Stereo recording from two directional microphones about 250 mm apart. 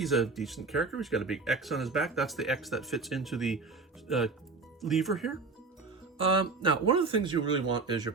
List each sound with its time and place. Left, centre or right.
0.0 s speech: centre
4.8 s speech: centre
6.1 s speech: right